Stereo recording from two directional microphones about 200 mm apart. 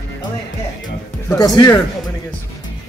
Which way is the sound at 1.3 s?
20° left (ahead or behind).